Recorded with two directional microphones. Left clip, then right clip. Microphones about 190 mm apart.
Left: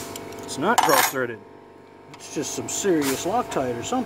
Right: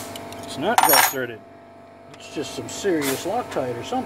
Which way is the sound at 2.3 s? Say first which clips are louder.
Left 1 dB; 45° left (ahead or behind).